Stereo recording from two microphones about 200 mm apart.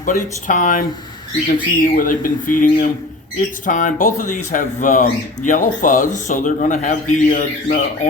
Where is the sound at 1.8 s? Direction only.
45° left (ahead or behind).